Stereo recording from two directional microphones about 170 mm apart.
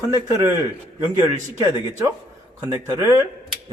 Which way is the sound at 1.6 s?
20° right (ahead or behind).